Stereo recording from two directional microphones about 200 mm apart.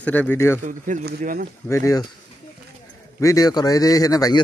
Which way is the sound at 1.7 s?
15° left (ahead or behind).